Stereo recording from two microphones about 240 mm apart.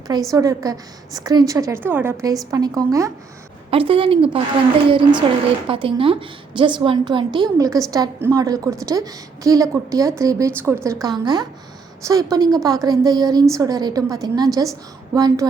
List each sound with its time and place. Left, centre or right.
0.1 s a woman's voice: centre